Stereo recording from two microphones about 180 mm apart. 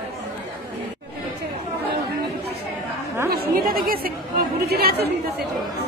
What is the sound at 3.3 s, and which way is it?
Chatter, 60° right (ahead or behind).